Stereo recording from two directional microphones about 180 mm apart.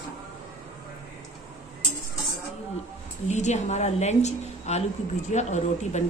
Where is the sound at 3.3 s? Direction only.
40° left (ahead or behind).